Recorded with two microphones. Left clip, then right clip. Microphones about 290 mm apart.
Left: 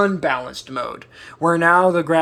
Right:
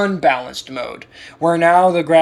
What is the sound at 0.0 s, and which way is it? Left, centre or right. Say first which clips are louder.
Speech: right 3 dB; centre.